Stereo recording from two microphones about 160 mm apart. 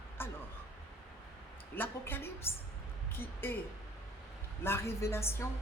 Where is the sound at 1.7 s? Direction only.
15° left (ahead or behind).